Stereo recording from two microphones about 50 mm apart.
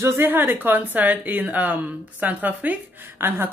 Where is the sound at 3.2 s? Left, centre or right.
Right.